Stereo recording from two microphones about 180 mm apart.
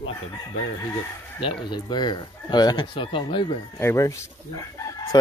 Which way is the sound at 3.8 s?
15° left (ahead or behind).